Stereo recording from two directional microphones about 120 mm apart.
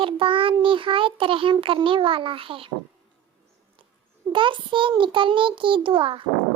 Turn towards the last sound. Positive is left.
turn(degrees=-45)  # may be behind; listen again after turning